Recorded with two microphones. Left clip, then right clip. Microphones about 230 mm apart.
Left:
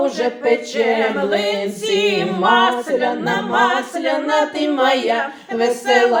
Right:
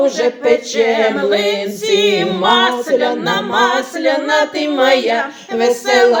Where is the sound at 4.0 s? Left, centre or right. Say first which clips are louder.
Right 4 dB; right.